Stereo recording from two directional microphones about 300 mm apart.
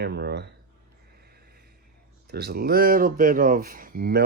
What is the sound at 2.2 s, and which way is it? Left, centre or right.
Speech, right.